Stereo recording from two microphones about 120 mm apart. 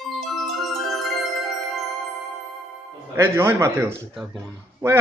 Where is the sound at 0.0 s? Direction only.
Centre (ahead or behind).